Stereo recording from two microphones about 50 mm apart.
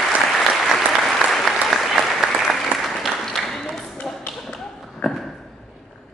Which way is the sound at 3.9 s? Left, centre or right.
Left.